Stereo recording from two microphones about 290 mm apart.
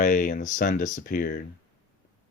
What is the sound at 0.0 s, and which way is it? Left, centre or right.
Speech, left.